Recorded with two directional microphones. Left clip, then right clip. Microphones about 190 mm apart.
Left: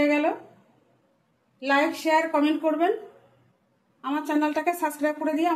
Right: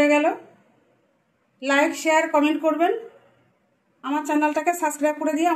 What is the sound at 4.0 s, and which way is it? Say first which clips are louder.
Speech: right 3 dB; 10° right (ahead or behind).